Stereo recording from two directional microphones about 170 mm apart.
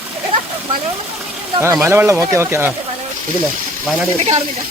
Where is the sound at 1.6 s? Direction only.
15° right (ahead or behind).